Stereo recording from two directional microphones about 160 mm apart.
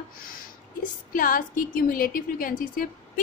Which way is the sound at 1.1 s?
60° left (ahead or behind).